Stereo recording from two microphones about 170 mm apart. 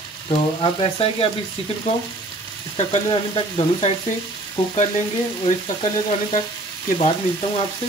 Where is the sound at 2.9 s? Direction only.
35° left (ahead or behind).